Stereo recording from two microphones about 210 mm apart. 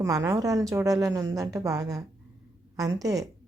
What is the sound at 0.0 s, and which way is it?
A woman's voice, 15° right (ahead or behind).